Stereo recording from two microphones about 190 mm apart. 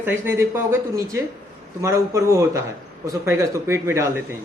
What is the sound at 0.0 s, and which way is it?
A man's voice, 10° right (ahead or behind).